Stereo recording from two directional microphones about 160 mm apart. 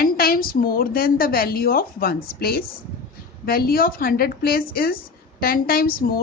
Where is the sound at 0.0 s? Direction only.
70° left (ahead or behind).